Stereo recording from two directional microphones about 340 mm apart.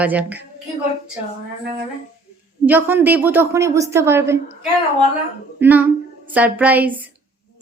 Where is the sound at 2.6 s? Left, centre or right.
Centre.